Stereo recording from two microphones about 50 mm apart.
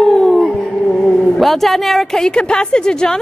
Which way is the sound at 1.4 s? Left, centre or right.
Centre.